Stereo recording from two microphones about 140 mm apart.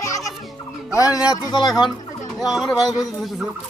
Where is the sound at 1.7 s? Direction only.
Centre (ahead or behind).